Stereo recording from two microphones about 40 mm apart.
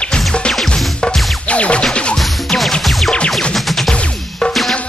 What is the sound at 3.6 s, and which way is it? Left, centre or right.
Music, centre.